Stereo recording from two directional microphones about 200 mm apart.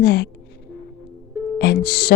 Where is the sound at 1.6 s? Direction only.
50° left (ahead or behind).